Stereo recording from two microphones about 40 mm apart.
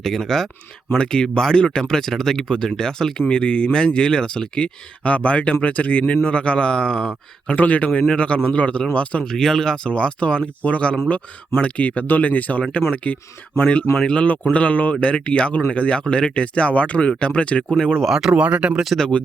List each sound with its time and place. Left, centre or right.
0.0 s speech: centre
3.2 s speech: left
7.5 s speech: left
9.2 s speech: centre
18.1 s speech: centre
18.3 s speech: right